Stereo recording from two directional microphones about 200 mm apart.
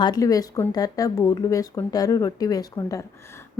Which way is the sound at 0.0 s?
20° left (ahead or behind).